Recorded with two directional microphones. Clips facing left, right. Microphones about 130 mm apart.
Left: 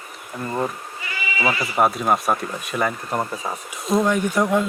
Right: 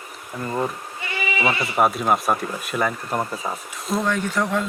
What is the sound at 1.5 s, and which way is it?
Speech, 25° right (ahead or behind).